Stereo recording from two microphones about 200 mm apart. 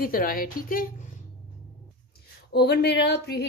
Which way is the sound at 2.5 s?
55° left (ahead or behind).